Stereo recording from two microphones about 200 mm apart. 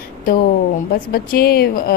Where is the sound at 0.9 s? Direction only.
50° left (ahead or behind).